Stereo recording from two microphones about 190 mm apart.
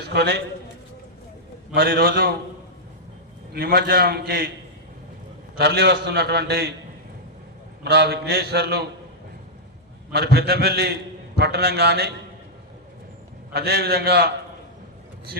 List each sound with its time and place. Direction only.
0.0 s a man's voice: 60° right (ahead or behind)
1.7 s a man's voice: 50° right (ahead or behind)
3.5 s a man's voice: 55° right (ahead or behind)
5.5 s a man's voice: 60° right (ahead or behind)
7.9 s a man's voice: 60° right (ahead or behind)
10.1 s a man's voice: 60° right (ahead or behind)
13.5 s a man's voice: 60° right (ahead or behind)